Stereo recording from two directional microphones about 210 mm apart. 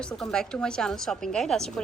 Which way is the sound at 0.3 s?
5° left (ahead or behind).